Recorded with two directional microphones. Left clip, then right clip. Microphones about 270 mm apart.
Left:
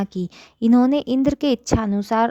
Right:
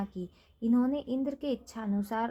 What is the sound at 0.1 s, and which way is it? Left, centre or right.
A woman's voice, left.